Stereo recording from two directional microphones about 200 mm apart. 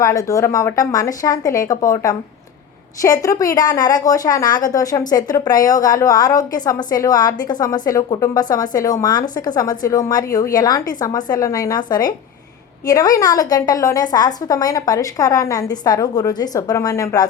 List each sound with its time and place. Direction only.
0.0 s a woman's voice: 15° left (ahead or behind)